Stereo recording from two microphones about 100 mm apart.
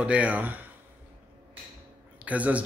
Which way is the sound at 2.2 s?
15° right (ahead or behind).